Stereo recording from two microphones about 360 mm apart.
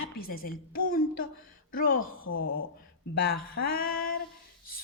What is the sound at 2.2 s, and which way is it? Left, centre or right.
Speech, left.